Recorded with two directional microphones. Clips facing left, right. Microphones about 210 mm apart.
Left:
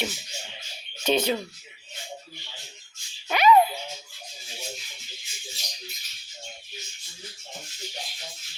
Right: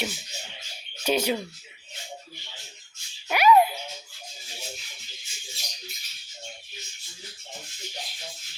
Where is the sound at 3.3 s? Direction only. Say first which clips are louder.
Even; 10° right (ahead or behind).